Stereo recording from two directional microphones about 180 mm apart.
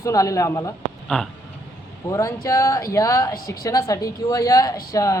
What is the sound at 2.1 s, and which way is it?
A woman's voice, 15° left (ahead or behind).